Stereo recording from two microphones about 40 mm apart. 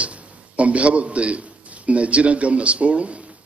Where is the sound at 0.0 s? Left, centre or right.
Right.